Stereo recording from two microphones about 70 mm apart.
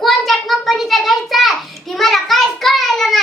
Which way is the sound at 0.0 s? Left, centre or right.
Centre.